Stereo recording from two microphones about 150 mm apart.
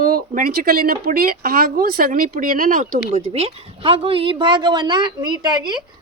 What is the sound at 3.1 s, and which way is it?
Speech, 45° right (ahead or behind).